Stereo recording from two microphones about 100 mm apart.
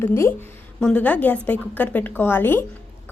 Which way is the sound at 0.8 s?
15° left (ahead or behind).